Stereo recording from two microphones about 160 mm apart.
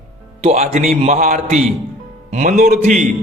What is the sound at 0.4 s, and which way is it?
Speech, 45° right (ahead or behind).